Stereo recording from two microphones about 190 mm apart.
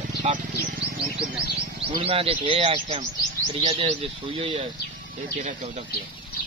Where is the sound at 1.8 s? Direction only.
30° right (ahead or behind).